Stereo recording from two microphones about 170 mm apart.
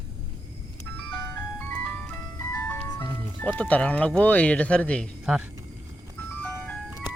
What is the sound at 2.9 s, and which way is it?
Speech, 10° left (ahead or behind).